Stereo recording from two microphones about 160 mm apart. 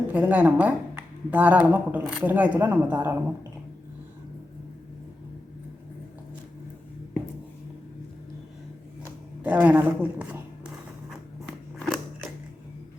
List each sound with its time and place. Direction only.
0.1 s speech: 10° right (ahead or behind)
9.4 s a man's voice: 10° right (ahead or behind)